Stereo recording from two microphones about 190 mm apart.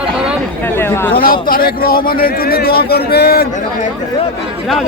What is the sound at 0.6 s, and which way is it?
Speech, 10° left (ahead or behind).